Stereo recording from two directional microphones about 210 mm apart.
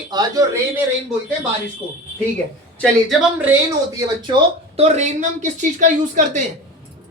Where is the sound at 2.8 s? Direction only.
Centre (ahead or behind).